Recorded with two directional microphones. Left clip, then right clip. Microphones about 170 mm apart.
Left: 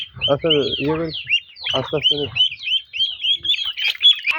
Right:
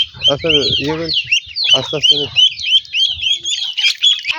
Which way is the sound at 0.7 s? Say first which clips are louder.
Right 6 dB; 10° right (ahead or behind).